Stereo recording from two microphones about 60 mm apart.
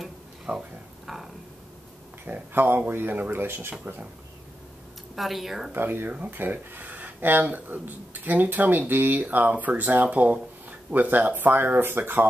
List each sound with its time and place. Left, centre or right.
0.5 s speech: right
1.0 s a sound: centre
2.5 s speech: right
5.1 s speech: centre
5.7 s speech: right